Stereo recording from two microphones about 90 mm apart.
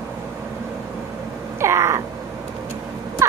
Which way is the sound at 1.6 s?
30° right (ahead or behind).